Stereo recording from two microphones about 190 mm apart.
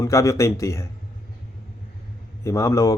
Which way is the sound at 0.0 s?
15° left (ahead or behind).